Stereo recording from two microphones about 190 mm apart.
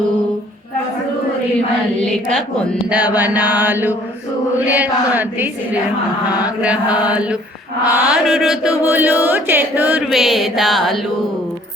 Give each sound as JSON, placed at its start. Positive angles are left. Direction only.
{"t": 2.0, "sound": "chant", "side_deg": 5}
{"t": 2.9, "sound": "mantra", "side_deg": -10}
{"t": 7.9, "sound": "chant", "side_deg": -5}